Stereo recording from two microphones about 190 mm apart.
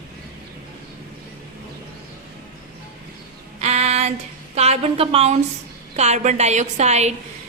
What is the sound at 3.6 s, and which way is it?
Female singing, 35° right (ahead or behind).